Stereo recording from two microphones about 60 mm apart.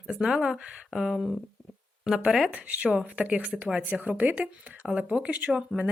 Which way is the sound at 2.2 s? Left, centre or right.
Centre.